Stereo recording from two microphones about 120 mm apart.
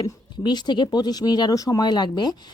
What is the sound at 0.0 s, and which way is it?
Speech, 35° left (ahead or behind).